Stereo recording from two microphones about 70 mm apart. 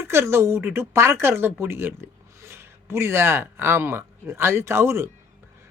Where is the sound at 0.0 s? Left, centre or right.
Right.